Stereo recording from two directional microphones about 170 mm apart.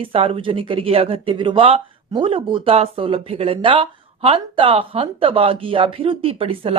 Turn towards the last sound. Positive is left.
turn(degrees=-35)  # may be behind; listen again after turning